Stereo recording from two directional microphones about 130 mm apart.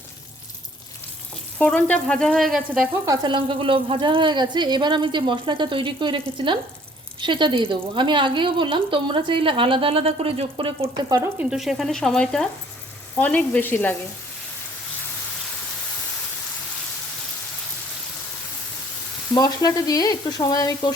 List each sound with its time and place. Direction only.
1.5 s frying: 10° left (ahead or behind)
3.2 s speech: 40° right (ahead or behind)
11.3 s frying: 5° right (ahead or behind)
13.1 s speech: 10° left (ahead or behind)
19.3 s speech: 30° left (ahead or behind)